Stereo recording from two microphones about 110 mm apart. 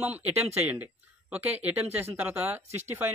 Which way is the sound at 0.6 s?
15° right (ahead or behind).